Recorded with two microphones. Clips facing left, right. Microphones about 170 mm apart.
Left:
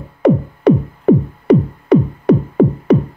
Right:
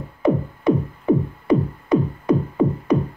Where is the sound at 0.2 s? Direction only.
75° left (ahead or behind).